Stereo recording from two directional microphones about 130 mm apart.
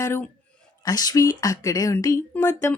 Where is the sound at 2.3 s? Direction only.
15° left (ahead or behind).